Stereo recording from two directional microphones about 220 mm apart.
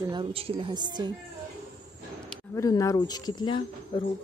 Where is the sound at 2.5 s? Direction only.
15° left (ahead or behind).